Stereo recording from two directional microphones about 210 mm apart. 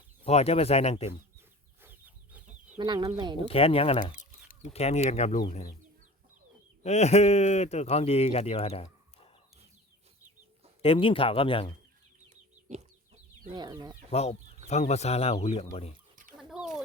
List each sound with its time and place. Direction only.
0.3 s speech: 30° left (ahead or behind)
1.4 s chicken: 10° right (ahead or behind)
2.7 s speech: 20° right (ahead or behind)
3.4 s speech: 25° left (ahead or behind)
6.8 s speech: 30° left (ahead or behind)
10.8 s speech: 25° left (ahead or behind)
12.3 s chicken: 35° right (ahead or behind)
13.5 s speech: 20° right (ahead or behind)
14.1 s speech: 30° left (ahead or behind)
16.4 s chicken: centre (ahead or behind)